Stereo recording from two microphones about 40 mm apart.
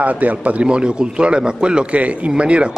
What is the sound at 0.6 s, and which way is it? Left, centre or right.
A man's voice, right.